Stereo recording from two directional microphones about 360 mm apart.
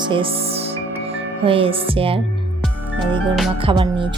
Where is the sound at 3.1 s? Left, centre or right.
Centre.